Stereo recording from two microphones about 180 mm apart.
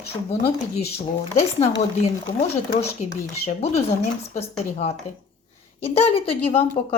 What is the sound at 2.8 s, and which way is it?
Speech, 35° left (ahead or behind).